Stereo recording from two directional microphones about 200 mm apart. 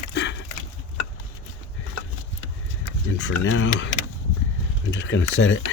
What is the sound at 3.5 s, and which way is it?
Speech, 75° left (ahead or behind).